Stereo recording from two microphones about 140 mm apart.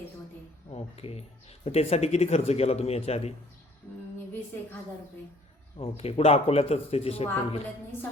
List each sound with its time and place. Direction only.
0.7 s a man's voice: 45° left (ahead or behind)
6.0 s a man's voice: 45° left (ahead or behind)